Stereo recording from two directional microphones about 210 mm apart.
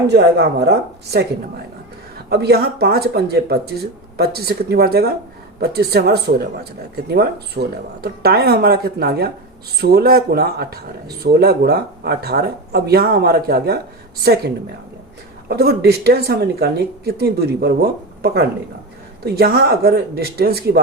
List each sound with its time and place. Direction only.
0.1 s speech: 50° right (ahead or behind)
15.4 s speech: 50° right (ahead or behind)